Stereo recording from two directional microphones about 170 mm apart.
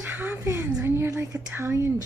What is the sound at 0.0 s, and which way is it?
A woman's voice, 10° right (ahead or behind).